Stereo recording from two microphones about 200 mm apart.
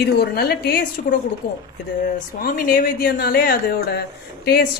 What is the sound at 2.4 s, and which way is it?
Speech, 45° left (ahead or behind).